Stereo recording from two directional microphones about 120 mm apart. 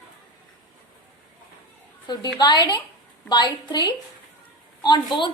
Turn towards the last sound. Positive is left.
turn(degrees=40)  # may be behind; listen again after turning